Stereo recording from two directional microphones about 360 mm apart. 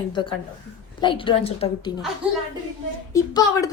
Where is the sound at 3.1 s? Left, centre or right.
Centre.